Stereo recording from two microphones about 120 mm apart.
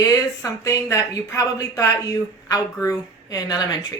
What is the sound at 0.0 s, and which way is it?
Speech, 30° left (ahead or behind).